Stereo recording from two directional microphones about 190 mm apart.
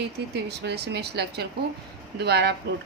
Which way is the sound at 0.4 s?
60° right (ahead or behind).